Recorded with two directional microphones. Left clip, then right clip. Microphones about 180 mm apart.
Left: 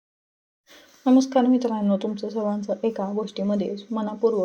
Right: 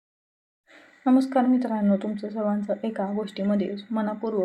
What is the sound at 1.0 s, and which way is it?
A woman's voice, 25° left (ahead or behind).